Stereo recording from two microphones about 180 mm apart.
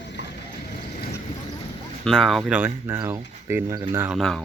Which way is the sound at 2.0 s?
Centre (ahead or behind).